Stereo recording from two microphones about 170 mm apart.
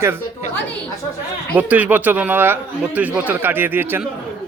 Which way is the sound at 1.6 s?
10° right (ahead or behind).